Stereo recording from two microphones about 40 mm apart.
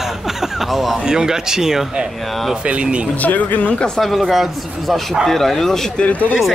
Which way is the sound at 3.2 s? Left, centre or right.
Left.